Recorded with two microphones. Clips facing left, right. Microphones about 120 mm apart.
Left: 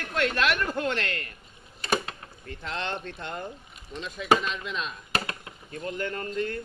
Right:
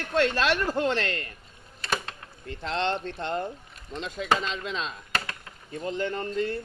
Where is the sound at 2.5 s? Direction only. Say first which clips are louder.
Right 5 dB; 30° right (ahead or behind).